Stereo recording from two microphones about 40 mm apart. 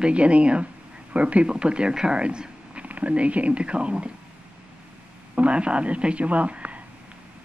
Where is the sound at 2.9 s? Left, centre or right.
Right.